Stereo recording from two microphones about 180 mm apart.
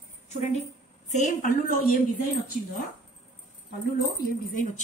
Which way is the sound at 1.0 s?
40° left (ahead or behind).